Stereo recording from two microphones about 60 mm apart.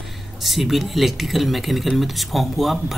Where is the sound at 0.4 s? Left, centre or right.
Centre.